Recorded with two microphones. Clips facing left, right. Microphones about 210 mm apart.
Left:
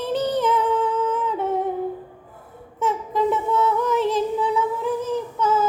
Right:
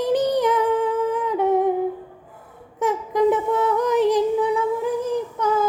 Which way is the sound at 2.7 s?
15° right (ahead or behind).